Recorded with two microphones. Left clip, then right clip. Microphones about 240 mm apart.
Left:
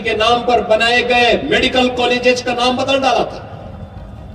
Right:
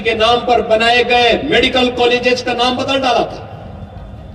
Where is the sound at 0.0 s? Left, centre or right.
Left.